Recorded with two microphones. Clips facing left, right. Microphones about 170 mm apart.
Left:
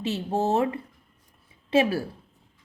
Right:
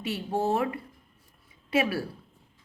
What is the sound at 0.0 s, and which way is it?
Speech, 25° left (ahead or behind).